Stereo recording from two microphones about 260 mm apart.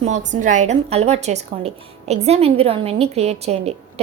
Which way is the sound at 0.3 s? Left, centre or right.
Right.